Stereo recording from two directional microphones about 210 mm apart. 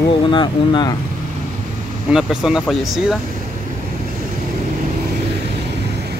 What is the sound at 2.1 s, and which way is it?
Speech, 5° right (ahead or behind).